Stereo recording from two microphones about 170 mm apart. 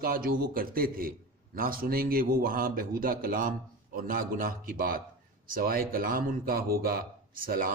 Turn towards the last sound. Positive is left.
turn(degrees=-55)  # may be behind; listen again after turning